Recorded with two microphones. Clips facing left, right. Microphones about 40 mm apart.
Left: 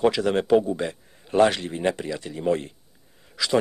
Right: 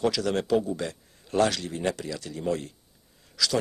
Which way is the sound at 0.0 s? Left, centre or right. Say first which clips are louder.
Left 5 dB; left.